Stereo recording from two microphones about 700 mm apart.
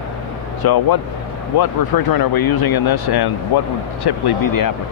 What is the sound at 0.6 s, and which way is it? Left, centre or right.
Speech, left.